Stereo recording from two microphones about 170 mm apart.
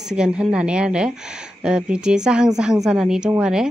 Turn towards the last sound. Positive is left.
turn(degrees=-5)  # may be behind; listen again after turning